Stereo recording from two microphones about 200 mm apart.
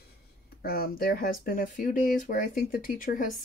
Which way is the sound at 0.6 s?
50° left (ahead or behind).